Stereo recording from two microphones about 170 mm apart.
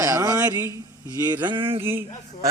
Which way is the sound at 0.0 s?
20° right (ahead or behind).